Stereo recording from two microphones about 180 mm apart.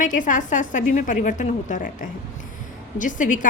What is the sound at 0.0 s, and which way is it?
A woman's voice, 45° left (ahead or behind).